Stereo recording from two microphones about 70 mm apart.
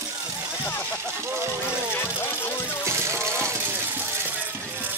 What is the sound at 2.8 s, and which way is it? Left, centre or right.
Music, right.